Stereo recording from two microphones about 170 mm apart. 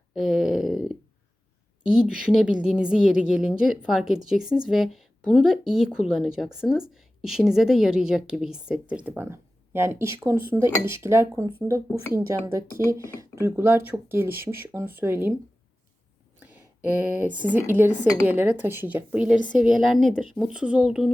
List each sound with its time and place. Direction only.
0.1 s a sound: centre (ahead or behind)
1.8 s a woman's voice: 5° right (ahead or behind)
17.2 s a woman's voice: 10° right (ahead or behind)